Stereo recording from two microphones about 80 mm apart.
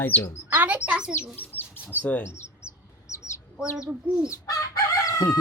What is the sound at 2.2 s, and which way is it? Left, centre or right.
Bird, left.